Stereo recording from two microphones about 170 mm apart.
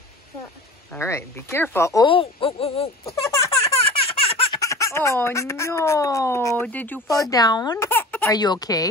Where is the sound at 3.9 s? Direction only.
35° left (ahead or behind).